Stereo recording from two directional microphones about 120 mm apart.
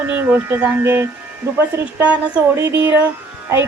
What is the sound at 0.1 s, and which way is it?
A woman's voice, 15° right (ahead or behind).